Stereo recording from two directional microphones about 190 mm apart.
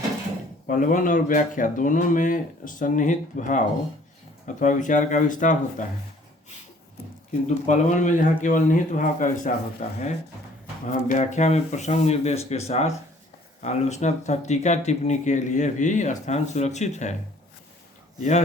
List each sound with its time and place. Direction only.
0.7 s speech: 45° left (ahead or behind)
7.4 s speech: 40° left (ahead or behind)
18.2 s speech: 40° left (ahead or behind)